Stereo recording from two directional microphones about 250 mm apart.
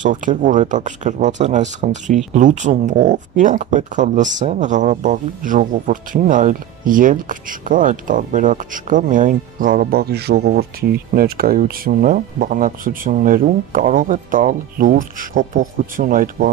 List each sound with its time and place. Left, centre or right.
0.0 s speech: right